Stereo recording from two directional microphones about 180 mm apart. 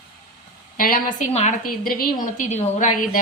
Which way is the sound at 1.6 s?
55° left (ahead or behind).